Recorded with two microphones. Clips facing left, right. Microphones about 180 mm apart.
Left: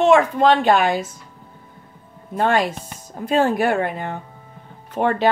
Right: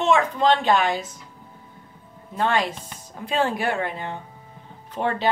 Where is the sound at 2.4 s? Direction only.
50° left (ahead or behind).